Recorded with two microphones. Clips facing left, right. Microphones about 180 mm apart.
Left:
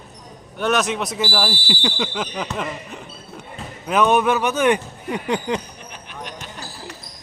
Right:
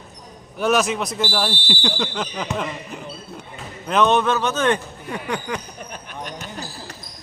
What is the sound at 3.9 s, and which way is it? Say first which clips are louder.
Speech: left 1 dB; 10° left (ahead or behind).